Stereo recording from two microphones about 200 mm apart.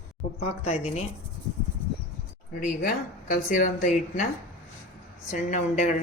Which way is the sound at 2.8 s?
45° left (ahead or behind).